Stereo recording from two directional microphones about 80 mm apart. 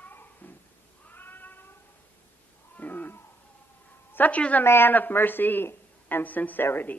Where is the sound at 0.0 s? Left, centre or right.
Left.